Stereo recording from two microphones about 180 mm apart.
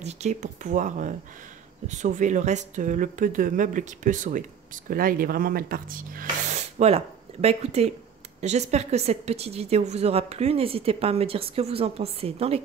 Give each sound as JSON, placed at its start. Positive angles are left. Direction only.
{"t": 0.0, "sound": "speech", "side_deg": -40}
{"t": 7.4, "sound": "a woman's voice", "side_deg": -35}